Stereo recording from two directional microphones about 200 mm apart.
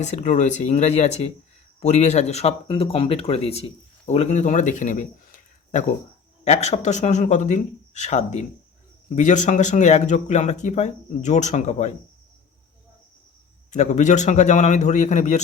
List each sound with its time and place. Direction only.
0.0 s speech: 35° left (ahead or behind)
13.7 s speech: 35° left (ahead or behind)